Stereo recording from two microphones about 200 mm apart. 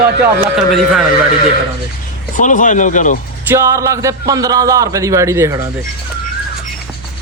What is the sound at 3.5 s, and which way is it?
A man's voice, 15° right (ahead or behind).